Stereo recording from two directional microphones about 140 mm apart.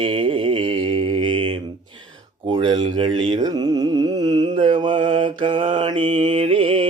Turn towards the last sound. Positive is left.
turn(degrees=-40)  # may be behind; listen again after turning